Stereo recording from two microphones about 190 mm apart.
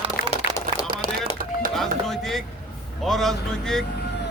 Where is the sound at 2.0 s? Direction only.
Centre (ahead or behind).